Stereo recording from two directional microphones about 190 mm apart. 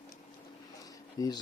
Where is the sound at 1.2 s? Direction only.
20° left (ahead or behind).